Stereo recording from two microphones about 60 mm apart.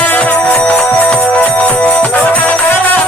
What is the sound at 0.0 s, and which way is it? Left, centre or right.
Music, left.